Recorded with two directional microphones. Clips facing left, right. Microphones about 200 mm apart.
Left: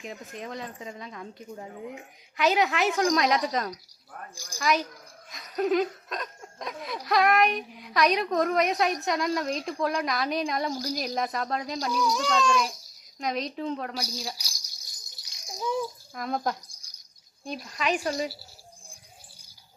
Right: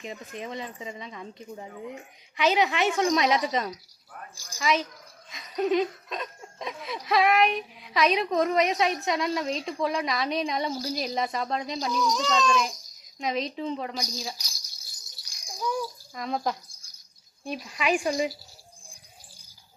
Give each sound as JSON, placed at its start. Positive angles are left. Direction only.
{"t": 0.0, "sound": "laughter", "side_deg": 0}
{"t": 11.9, "sound": "a child's voice", "side_deg": 10}
{"t": 13.1, "sound": "laughter", "side_deg": 0}
{"t": 15.2, "sound": "rattle", "side_deg": 20}
{"t": 16.1, "sound": "laughter", "side_deg": 0}
{"t": 17.4, "sound": "a woman's voice", "side_deg": -5}